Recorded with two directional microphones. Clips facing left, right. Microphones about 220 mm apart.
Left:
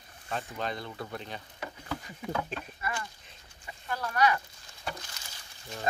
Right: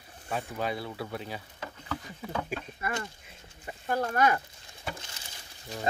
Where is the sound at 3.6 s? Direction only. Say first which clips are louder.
Right 6 dB; 45° right (ahead or behind).